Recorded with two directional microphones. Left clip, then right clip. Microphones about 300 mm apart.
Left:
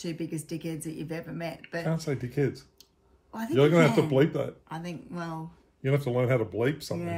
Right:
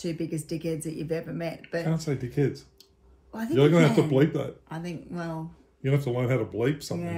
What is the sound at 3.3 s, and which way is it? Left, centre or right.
Speech, centre.